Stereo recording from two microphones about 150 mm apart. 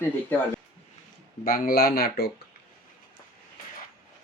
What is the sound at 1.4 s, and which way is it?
Speech, 75° left (ahead or behind).